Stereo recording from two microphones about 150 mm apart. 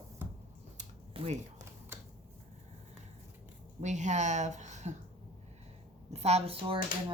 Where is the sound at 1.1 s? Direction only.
45° right (ahead or behind).